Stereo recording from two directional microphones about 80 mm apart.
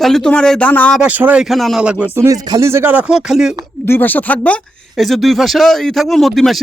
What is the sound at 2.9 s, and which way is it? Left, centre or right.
Speech, centre.